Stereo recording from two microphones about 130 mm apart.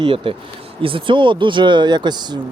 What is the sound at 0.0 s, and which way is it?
Speech, 40° right (ahead or behind).